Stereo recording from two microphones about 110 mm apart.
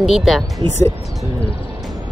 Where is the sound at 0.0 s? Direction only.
Centre (ahead or behind).